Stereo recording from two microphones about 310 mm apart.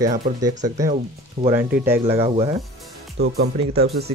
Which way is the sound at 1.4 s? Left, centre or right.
Centre.